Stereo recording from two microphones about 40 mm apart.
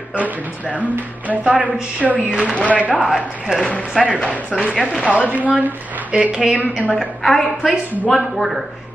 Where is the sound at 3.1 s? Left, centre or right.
Centre.